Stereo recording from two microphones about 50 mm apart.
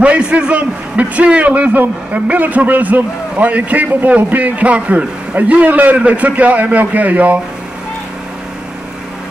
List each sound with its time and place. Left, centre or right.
0.0 s a man's voice: right